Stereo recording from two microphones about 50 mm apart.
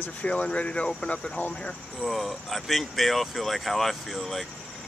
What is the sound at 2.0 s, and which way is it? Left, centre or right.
Speech, centre.